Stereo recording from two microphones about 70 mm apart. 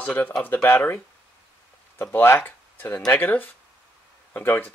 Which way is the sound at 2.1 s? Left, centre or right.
Left.